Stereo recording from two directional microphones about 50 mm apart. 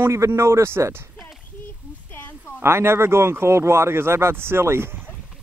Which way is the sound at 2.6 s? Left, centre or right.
Right.